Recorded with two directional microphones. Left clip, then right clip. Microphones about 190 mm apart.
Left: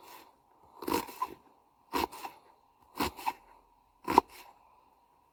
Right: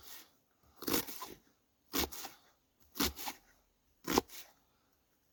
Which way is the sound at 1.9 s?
30° right (ahead or behind).